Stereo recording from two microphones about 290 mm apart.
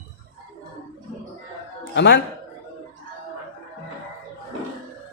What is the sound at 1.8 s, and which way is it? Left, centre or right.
Speech, left.